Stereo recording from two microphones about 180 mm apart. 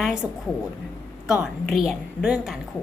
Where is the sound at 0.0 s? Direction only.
5° right (ahead or behind).